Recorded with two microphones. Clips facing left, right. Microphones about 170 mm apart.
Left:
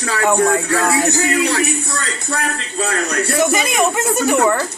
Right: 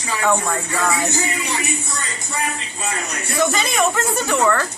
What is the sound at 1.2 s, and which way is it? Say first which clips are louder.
A man's voice: left 8 dB; 70° left (ahead or behind).